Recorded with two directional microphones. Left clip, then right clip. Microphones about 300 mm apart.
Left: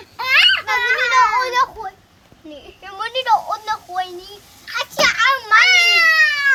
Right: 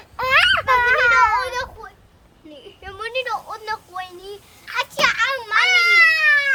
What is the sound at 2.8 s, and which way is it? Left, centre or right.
A woman's voice, centre.